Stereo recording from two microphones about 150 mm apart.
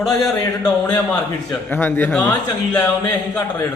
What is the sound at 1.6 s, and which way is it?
Speech, 15° left (ahead or behind).